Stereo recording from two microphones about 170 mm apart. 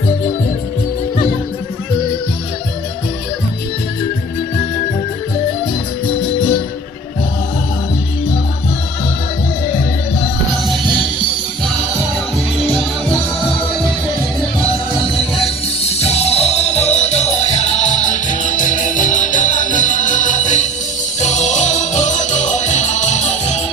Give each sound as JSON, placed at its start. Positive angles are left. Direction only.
{"t": 15.1, "sound": "music", "side_deg": 35}